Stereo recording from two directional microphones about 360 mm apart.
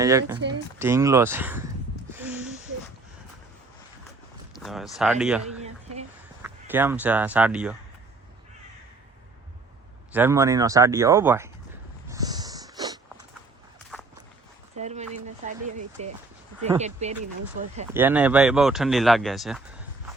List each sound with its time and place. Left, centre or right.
0.0 s speech: centre
2.0 s a sound: centre
4.6 s speech: centre
5.6 s a sound: centre
6.4 s speech: centre
10.1 s speech: centre
12.0 s snort: centre
14.8 s a sound: centre
16.8 s speech: centre
17.8 s speech: centre